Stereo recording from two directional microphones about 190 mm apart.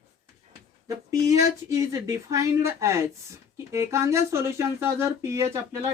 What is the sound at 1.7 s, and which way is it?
Speech, 15° right (ahead or behind).